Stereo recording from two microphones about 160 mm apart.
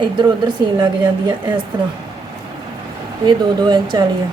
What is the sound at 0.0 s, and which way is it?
Speech, 30° right (ahead or behind).